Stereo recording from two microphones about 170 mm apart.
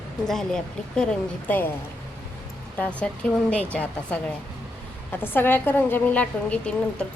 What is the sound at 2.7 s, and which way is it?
A woman's voice, 5° left (ahead or behind).